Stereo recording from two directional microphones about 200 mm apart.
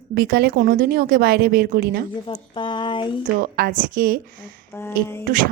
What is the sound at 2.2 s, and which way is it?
Speech, 25° left (ahead or behind).